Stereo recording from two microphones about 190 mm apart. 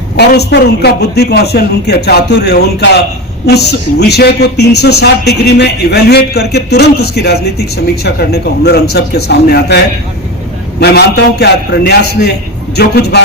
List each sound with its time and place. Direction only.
0.2 s speech: 60° left (ahead or behind)